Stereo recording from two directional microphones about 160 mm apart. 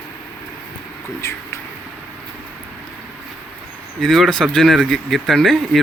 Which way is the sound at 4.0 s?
Centre (ahead or behind).